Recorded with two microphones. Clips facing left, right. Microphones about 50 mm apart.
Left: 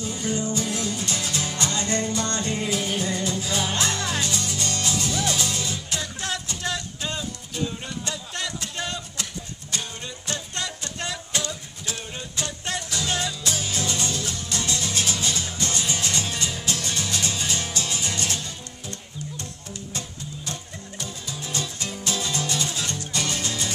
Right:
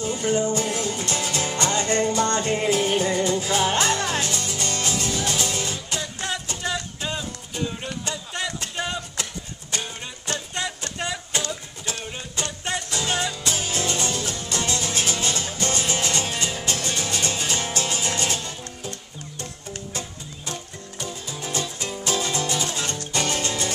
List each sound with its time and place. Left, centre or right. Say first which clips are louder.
0.0 s music: right 5 dB; right
5.9 s music: right 2 dB; centre
8.1 s a sound: right 2 dB; centre
8.7 s music: right 4 dB; centre
9.1 s music: right 1 dB; right
12.9 s music: right 1 dB; right
21.5 s music: right 2 dB; right